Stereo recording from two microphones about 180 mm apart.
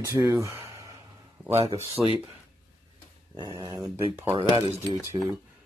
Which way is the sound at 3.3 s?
20° right (ahead or behind).